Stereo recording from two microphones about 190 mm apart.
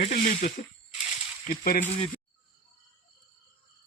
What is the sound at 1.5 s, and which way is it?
Speech, 50° left (ahead or behind).